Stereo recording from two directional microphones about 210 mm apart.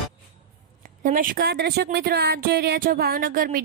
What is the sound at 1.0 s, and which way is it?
A woman's voice, 40° right (ahead or behind).